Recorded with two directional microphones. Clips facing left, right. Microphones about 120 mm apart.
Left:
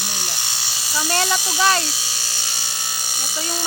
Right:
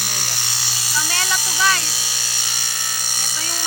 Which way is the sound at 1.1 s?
30° left (ahead or behind).